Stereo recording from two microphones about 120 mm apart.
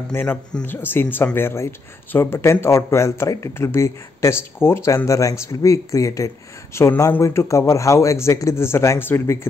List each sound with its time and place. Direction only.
0.1 s a man's voice: 20° left (ahead or behind)